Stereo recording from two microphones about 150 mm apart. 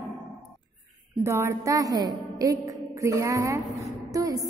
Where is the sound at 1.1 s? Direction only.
20° right (ahead or behind).